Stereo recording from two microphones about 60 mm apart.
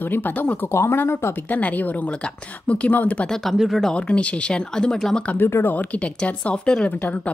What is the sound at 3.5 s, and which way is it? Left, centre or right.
Speech, centre.